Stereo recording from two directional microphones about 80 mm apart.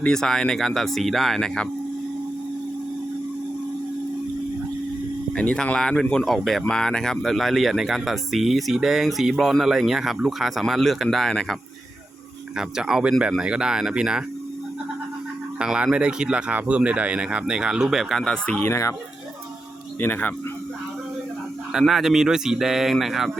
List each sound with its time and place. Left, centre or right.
0.0 s speech: centre
5.3 s speech: centre
12.5 s speech: centre
15.5 s speech: centre
18.6 s speech: left
20.0 s speech: left
21.7 s speech: centre